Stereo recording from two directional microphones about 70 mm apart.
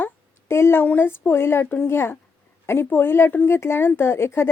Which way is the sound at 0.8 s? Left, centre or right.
Left.